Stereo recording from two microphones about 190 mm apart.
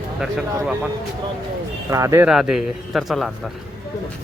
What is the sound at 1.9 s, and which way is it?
Speech, 15° right (ahead or behind).